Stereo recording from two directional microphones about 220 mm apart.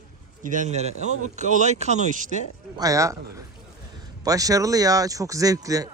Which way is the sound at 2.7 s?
15° right (ahead or behind).